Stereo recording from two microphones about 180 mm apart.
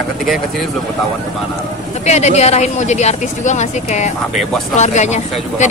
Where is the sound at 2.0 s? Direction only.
40° left (ahead or behind).